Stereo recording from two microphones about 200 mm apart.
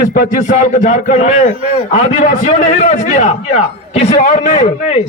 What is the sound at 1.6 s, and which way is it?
Speech, 30° right (ahead or behind).